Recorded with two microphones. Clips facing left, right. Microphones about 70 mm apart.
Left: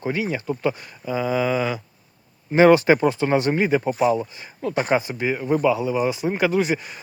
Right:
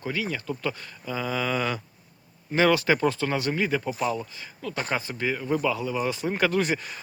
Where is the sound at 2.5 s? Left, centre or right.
Left.